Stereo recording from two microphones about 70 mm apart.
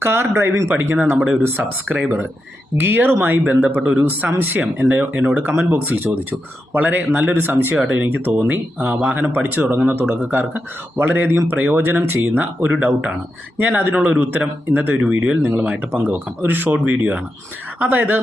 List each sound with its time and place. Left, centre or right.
0.0 s speech: right
0.7 s speech: right
1.9 s speech: centre
13.9 s speech: centre
14.2 s speech: right